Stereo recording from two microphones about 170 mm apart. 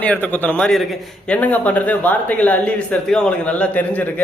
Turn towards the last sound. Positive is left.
turn(degrees=10)  # may be behind; listen again after turning